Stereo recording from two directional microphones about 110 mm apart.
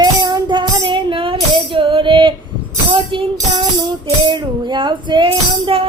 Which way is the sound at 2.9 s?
50° right (ahead or behind).